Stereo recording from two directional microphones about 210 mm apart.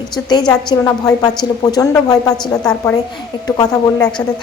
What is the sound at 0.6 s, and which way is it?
A woman's voice, 15° left (ahead or behind).